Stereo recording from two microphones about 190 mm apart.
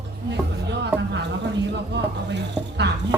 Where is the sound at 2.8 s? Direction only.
60° right (ahead or behind).